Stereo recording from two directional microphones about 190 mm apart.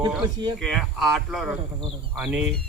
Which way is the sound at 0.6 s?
Centre (ahead or behind).